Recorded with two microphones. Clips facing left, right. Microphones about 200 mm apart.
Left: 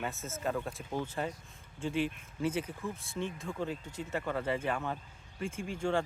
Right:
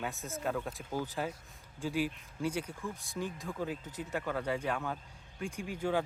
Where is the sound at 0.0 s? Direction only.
Centre (ahead or behind).